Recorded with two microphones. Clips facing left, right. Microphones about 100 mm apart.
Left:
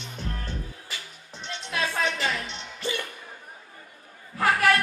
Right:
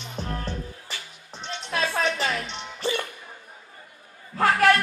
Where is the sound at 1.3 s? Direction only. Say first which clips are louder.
Right 3 dB; 20° right (ahead or behind).